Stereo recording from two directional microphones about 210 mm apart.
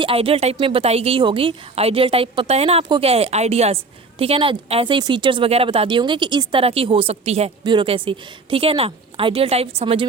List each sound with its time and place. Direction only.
0.0 s speech: 25° right (ahead or behind)